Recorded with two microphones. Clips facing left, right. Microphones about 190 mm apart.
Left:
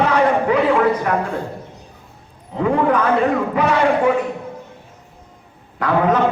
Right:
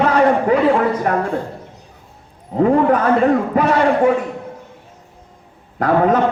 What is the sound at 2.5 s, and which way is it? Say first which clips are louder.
A man's voice: right 3 dB; 45° right (ahead or behind).